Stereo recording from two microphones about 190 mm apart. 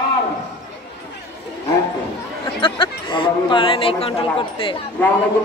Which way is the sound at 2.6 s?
25° left (ahead or behind).